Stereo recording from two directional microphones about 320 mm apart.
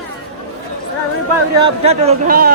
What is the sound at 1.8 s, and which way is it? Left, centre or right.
Speech, centre.